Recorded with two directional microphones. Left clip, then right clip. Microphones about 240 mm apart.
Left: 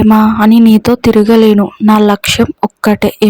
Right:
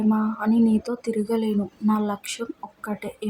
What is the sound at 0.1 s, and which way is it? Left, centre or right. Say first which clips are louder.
Speech: left 16 dB; left.